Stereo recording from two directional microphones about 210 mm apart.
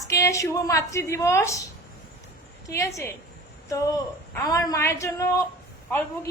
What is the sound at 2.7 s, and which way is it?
A woman's voice, 15° left (ahead or behind).